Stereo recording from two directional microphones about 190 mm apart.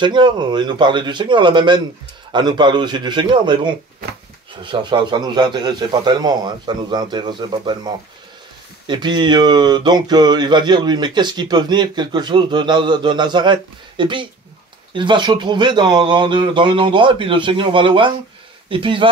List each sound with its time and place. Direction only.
0.0 s speech: 25° right (ahead or behind)